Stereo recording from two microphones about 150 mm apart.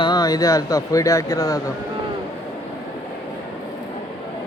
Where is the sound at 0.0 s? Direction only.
25° left (ahead or behind).